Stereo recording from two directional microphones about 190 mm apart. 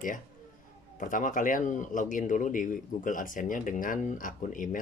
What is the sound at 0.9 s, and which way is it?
A man's voice, 45° left (ahead or behind).